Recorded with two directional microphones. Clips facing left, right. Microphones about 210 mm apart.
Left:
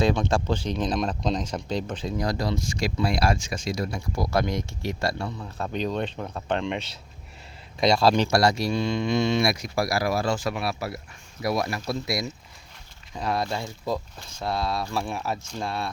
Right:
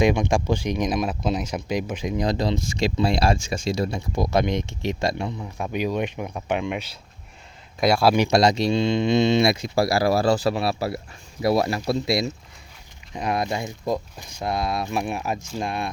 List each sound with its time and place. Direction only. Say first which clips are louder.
0.0 s speech: right 3 dB; 15° right (ahead or behind)
7.8 s speech: right 2 dB; 5° right (ahead or behind)